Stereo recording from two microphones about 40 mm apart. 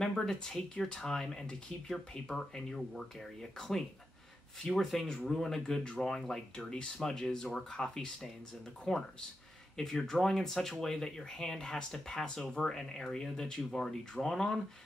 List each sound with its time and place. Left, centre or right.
0.0 s speech: centre
3.5 s speech: centre